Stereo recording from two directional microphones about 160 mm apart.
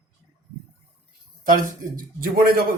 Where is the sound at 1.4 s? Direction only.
55° right (ahead or behind).